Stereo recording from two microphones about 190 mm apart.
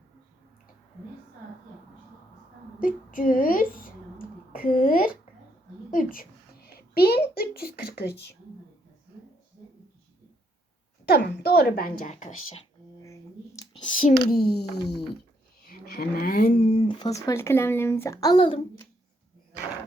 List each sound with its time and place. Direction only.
2.8 s a woman's voice: 45° left (ahead or behind)
4.5 s a sound: 45° left (ahead or behind)
5.9 s a child's voice: 45° left (ahead or behind)
11.0 s speech: 55° left (ahead or behind); by 12.6 s 40° left (ahead or behind)
14.3 s speech: 55° left (ahead or behind); by 18.6 s 25° left (ahead or behind)